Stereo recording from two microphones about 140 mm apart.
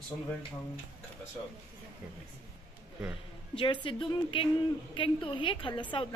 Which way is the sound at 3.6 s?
40° left (ahead or behind).